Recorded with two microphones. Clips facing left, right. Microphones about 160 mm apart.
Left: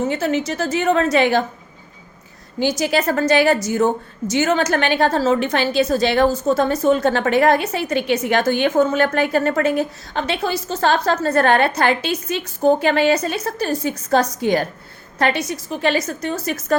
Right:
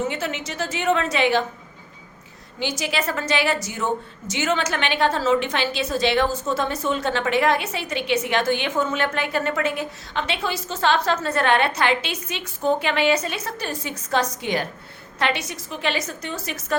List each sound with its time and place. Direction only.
0.1 s a woman's voice: 40° left (ahead or behind)
2.6 s a woman's voice: 40° left (ahead or behind)